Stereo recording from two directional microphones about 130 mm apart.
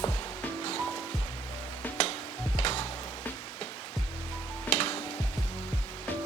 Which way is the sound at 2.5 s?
50° left (ahead or behind).